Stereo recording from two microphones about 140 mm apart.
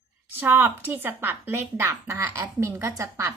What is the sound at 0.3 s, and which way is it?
Speech, 15° right (ahead or behind).